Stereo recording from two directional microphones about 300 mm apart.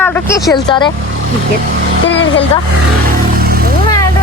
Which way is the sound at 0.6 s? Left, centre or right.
Centre.